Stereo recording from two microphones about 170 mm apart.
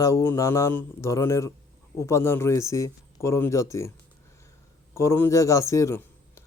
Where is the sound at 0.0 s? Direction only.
20° left (ahead or behind).